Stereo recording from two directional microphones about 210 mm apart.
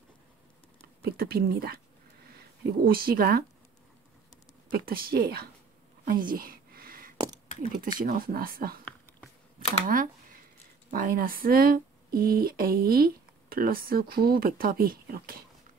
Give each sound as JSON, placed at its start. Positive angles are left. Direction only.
{"t": 1.0, "sound": "speech", "side_deg": -45}
{"t": 4.6, "sound": "speech", "side_deg": -45}
{"t": 6.0, "sound": "a sound", "side_deg": -45}
{"t": 8.0, "sound": "speech", "side_deg": -40}
{"t": 9.8, "sound": "speech", "side_deg": -40}